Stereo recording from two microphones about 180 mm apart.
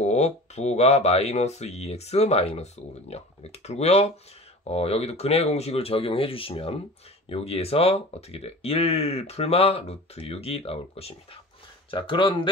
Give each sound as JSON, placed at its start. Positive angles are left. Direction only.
{"t": 0.0, "sound": "speech", "side_deg": 40}